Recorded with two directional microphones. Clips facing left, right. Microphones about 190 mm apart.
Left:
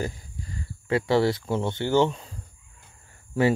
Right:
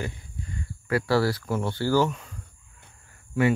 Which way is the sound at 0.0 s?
35° left (ahead or behind).